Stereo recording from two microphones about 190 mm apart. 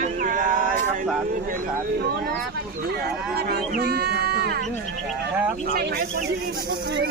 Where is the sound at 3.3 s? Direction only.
55° right (ahead or behind).